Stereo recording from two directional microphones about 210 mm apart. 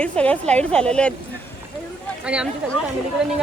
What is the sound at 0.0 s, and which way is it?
Speech, 5° left (ahead or behind).